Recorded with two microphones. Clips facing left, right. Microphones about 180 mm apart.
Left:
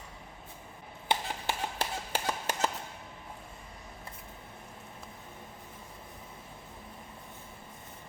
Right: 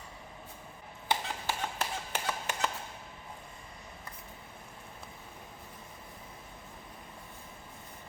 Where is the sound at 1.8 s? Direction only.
30° left (ahead or behind).